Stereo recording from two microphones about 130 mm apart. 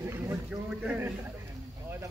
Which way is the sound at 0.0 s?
20° right (ahead or behind).